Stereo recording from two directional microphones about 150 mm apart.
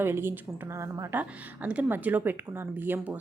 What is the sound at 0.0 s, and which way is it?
A woman's voice, 15° right (ahead or behind).